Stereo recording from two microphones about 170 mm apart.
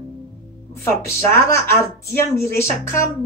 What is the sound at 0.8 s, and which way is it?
Speech, 15° left (ahead or behind).